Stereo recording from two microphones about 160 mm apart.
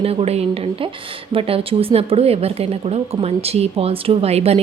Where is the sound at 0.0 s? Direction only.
40° right (ahead or behind).